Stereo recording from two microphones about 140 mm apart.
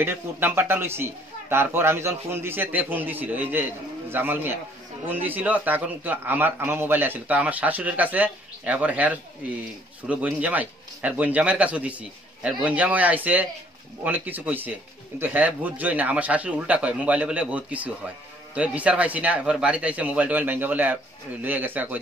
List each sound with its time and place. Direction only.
0.0 s speech: 15° right (ahead or behind)